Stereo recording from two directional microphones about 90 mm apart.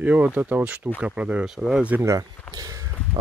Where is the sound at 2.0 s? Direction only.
35° right (ahead or behind).